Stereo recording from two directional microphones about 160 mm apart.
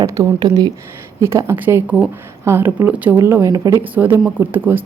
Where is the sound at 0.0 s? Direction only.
20° right (ahead or behind).